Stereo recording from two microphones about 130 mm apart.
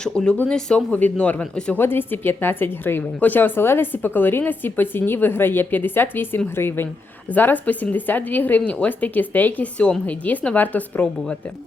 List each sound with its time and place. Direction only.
0.0 s speech: 5° left (ahead or behind)